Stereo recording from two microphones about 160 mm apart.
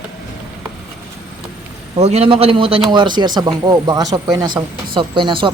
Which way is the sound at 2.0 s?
40° right (ahead or behind).